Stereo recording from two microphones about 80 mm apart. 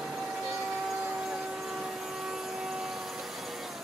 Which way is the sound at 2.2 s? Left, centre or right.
Centre.